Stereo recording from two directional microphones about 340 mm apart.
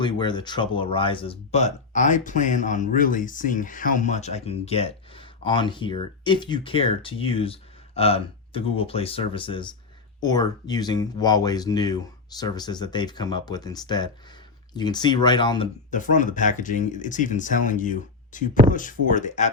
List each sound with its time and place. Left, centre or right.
0.0 s speech: centre